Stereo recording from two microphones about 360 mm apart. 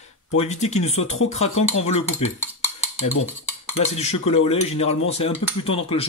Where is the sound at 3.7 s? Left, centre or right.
Centre.